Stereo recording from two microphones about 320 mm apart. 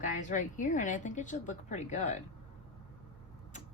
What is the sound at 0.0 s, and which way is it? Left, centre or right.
Speech, left.